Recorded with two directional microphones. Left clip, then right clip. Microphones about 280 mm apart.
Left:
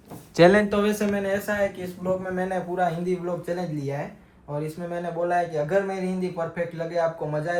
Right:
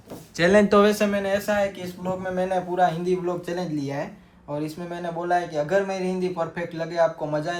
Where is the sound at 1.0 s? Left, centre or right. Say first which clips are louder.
Right 2 dB; centre.